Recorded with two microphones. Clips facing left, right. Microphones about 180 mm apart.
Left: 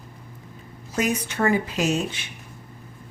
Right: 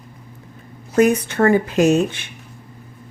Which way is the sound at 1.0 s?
55° right (ahead or behind).